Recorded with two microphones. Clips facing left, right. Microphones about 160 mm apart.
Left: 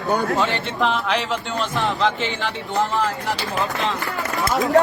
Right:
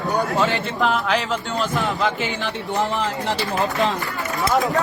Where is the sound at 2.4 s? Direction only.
20° right (ahead or behind).